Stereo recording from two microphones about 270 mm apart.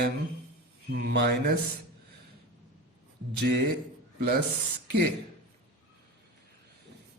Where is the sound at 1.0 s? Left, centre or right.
Right.